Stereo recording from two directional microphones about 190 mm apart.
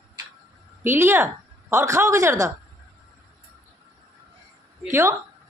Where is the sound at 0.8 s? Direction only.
10° right (ahead or behind).